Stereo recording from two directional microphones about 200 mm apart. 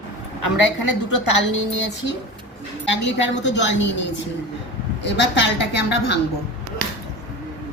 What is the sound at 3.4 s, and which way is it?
Speech, 65° left (ahead or behind).